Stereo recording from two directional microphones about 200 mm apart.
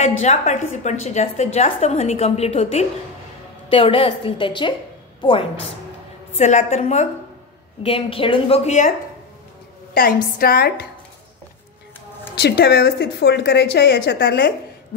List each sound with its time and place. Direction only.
0.2 s a woman's voice: 35° left (ahead or behind)
6.3 s a woman's voice: 35° left (ahead or behind)
10.4 s speech: 50° left (ahead or behind)
12.4 s a woman's voice: 55° left (ahead or behind)